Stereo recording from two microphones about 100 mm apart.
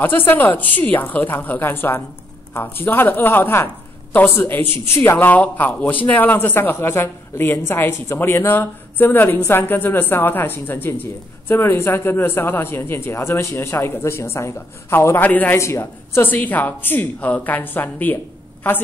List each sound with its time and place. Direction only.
0.3 s a woman's voice: 20° left (ahead or behind)
15.2 s a woman's voice: 15° left (ahead or behind)
15.5 s a woman's voice: 25° left (ahead or behind)